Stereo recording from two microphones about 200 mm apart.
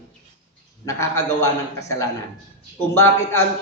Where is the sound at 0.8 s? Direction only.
15° left (ahead or behind).